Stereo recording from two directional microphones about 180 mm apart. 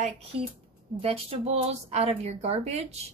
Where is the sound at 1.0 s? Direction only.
35° right (ahead or behind).